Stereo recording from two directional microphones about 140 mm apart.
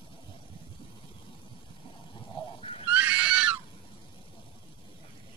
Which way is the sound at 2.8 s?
10° right (ahead or behind).